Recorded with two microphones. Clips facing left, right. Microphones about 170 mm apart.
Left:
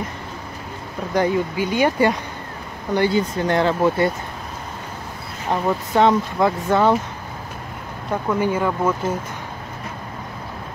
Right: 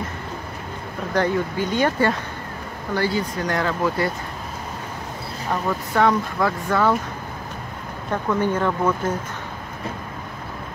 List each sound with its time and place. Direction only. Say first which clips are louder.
1.1 s speech: left 2 dB; 10° left (ahead or behind); by 4.1 s 25° left (ahead or behind)
5.5 s speech: left 4 dB; 20° left (ahead or behind)
8.1 s speech: left 1 dB; 10° left (ahead or behind)